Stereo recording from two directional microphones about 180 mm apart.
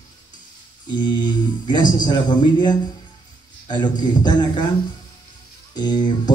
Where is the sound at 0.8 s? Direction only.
25° left (ahead or behind).